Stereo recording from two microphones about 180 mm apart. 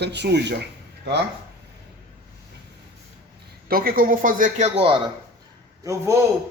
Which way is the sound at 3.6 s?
55° right (ahead or behind).